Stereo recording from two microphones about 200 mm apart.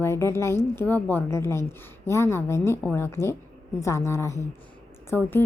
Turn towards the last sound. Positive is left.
turn(degrees=10)  # may be behind; listen again after turning